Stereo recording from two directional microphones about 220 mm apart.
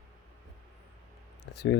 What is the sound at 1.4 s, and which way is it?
Speech, 50° left (ahead or behind).